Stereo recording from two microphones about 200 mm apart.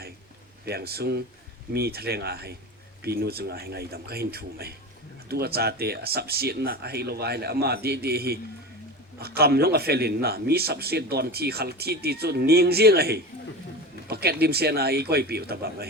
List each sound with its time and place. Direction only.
0.6 s a man's voice: 50° right (ahead or behind)